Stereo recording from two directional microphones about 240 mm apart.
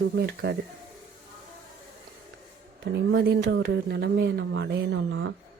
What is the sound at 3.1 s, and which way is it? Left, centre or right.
Speech, right.